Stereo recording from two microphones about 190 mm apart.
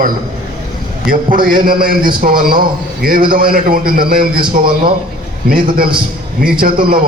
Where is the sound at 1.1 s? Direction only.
45° right (ahead or behind).